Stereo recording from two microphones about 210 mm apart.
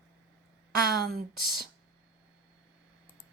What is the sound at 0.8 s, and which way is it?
Speech, 45° right (ahead or behind).